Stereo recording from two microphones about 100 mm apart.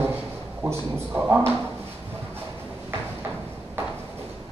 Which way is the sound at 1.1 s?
15° right (ahead or behind).